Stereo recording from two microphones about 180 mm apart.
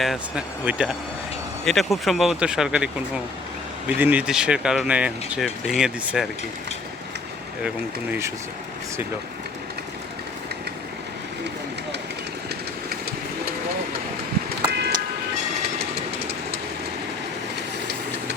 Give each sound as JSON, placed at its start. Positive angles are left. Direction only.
{"t": 0.0, "sound": "speech", "side_deg": -5}
{"t": 14.7, "sound": "vehicle", "side_deg": -70}